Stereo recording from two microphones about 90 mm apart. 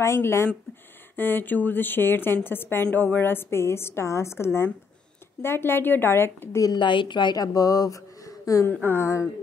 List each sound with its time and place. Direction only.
0.0 s a woman's voice: 30° left (ahead or behind)
6.8 s a woman's voice: 65° left (ahead or behind); by 9.3 s 30° left (ahead or behind)